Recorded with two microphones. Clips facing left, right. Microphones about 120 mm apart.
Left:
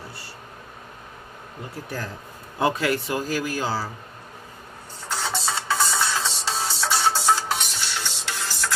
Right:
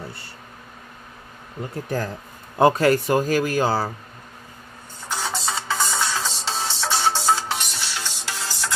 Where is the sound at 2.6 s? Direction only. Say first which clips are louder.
Right 6 dB; 45° right (ahead or behind).